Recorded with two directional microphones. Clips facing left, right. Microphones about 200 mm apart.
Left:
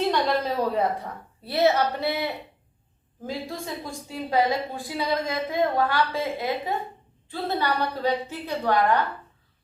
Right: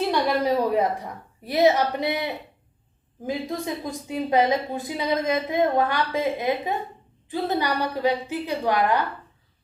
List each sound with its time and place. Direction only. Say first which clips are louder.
0.1 s a woman's voice: right 2 dB; 15° right (ahead or behind)